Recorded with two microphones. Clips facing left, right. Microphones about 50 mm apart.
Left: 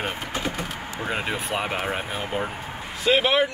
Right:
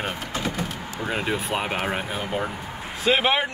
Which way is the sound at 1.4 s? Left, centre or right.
Centre.